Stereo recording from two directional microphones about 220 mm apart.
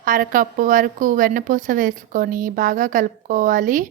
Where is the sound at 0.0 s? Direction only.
40° right (ahead or behind).